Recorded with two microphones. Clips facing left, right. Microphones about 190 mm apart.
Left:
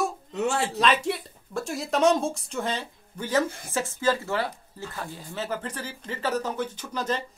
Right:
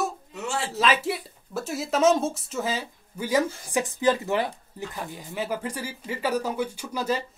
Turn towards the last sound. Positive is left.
turn(degrees=-10)  # may be behind; listen again after turning